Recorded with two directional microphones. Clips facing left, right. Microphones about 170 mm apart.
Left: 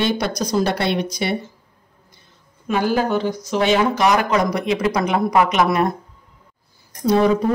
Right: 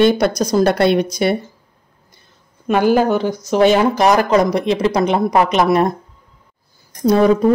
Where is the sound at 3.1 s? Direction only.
45° right (ahead or behind).